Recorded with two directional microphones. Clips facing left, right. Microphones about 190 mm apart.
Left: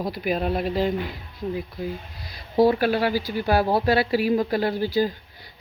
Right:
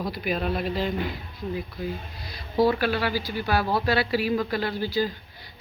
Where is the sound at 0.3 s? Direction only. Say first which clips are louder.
Left 3 dB; 40° left (ahead or behind).